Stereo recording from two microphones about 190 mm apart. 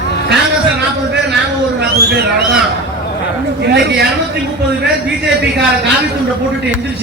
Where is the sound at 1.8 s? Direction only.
55° right (ahead or behind).